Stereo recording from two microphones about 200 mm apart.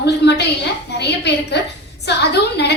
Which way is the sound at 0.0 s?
55° left (ahead or behind).